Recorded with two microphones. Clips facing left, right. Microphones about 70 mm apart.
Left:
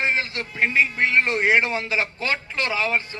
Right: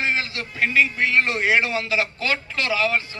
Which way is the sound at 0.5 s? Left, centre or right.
Left.